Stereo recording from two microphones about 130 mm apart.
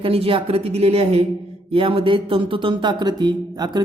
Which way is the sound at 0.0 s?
45° right (ahead or behind).